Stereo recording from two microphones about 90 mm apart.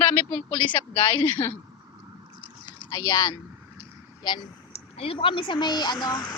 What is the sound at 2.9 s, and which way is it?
Speech, 45° left (ahead or behind).